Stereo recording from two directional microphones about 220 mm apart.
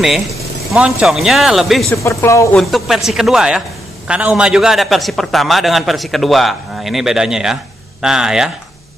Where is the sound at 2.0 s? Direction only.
15° left (ahead or behind).